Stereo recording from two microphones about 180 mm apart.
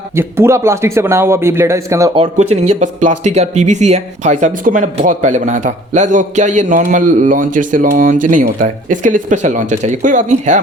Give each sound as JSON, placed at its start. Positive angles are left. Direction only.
{"t": 0.2, "sound": "speech", "side_deg": -15}
{"t": 2.1, "sound": "speech", "side_deg": -35}